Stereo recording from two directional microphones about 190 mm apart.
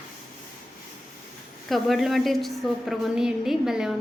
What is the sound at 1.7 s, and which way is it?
A woman's voice, centre (ahead or behind).